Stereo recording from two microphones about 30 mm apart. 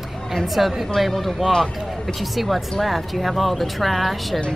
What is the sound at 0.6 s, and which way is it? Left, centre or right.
Speech, centre.